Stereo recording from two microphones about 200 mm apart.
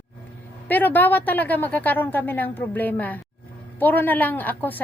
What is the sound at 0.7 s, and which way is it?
A woman's voice, 10° left (ahead or behind).